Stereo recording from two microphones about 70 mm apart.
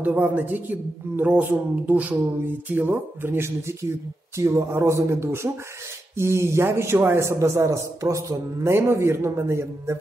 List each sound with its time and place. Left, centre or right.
0.0 s a man's voice: right
8.6 s a man's voice: right